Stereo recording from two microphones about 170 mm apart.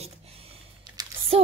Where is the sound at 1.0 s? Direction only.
25° right (ahead or behind).